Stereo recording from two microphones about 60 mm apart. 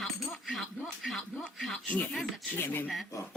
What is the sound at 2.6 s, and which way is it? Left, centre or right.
Speech, left.